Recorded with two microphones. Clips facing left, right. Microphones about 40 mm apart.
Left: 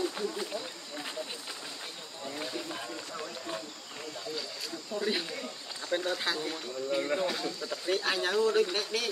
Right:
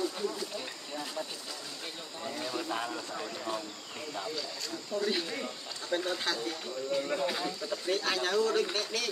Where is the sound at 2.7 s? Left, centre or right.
Right.